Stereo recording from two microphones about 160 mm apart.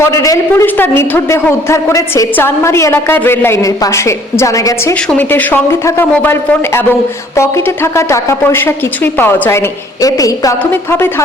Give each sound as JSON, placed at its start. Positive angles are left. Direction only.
{"t": 0.0, "sound": "a woman's voice", "side_deg": 20}